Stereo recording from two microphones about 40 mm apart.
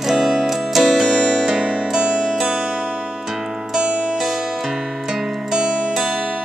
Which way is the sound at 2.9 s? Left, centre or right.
Right.